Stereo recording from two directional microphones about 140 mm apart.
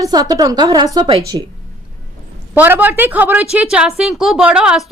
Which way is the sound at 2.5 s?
15° right (ahead or behind).